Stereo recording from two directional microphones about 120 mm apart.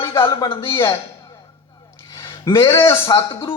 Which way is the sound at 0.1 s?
25° left (ahead or behind).